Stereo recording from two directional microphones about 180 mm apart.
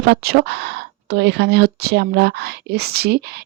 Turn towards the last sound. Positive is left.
turn(degrees=-65)  # may be behind; listen again after turning